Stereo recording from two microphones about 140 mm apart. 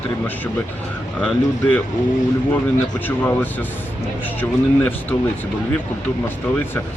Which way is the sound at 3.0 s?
10° left (ahead or behind).